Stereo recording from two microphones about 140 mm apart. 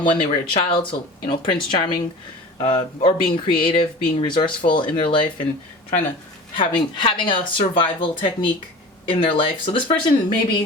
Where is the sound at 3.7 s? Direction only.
40° left (ahead or behind).